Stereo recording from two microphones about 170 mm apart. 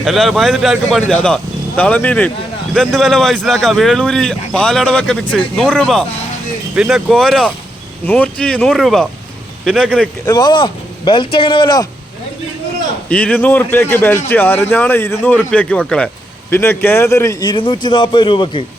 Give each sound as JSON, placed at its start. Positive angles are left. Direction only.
{"t": 0.0, "sound": "a man's voice", "side_deg": 0}
{"t": 10.2, "sound": "speech", "side_deg": 25}
{"t": 13.1, "sound": "a man's voice", "side_deg": 10}